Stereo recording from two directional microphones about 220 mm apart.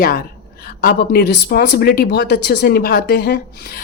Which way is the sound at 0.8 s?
45° left (ahead or behind).